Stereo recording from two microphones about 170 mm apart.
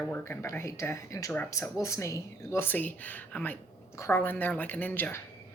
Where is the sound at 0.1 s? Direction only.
10° left (ahead or behind).